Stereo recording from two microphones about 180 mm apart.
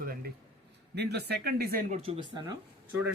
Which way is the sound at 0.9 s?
65° right (ahead or behind).